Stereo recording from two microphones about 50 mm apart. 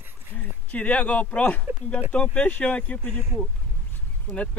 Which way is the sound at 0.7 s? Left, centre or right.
Left.